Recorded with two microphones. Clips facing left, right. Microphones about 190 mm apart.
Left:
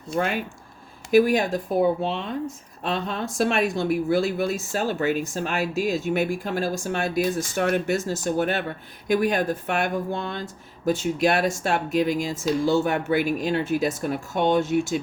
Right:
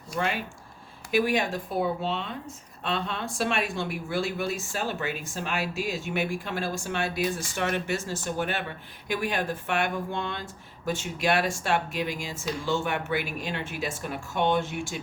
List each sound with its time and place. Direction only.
0.1 s speech: 25° left (ahead or behind)
1.1 s speech: 40° left (ahead or behind)